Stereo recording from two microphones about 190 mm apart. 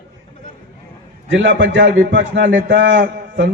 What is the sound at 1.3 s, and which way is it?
Speech, 70° right (ahead or behind).